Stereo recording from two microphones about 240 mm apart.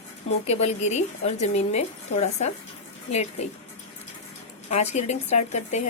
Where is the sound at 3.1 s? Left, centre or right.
Left.